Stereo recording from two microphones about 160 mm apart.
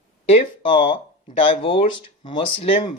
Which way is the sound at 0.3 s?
35° left (ahead or behind).